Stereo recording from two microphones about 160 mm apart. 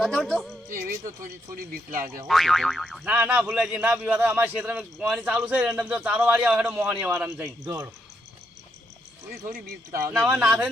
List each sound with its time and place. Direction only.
0.0 s a sound: 5° left (ahead or behind)
0.7 s music: 55° right (ahead or behind)
1.5 s speech: 60° right (ahead or behind)
2.2 s a man's voice: centre (ahead or behind)
9.5 s speech: 65° right (ahead or behind)
10.1 s a man's voice: 5° right (ahead or behind)